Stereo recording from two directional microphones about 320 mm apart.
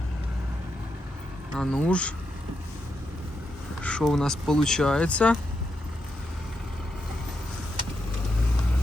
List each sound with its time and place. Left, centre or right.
1.5 s speech: centre
3.8 s speech: centre